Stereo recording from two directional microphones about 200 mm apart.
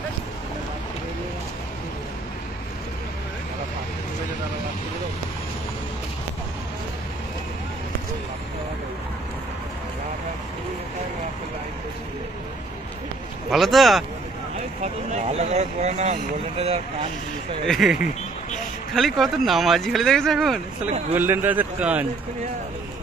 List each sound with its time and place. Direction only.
13.5 s speech: centre (ahead or behind)
14.8 s speech: 35° right (ahead or behind)
17.6 s speech: centre (ahead or behind)